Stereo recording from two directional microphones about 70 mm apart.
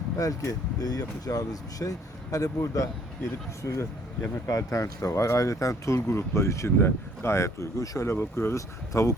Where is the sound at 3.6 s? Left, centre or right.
Left.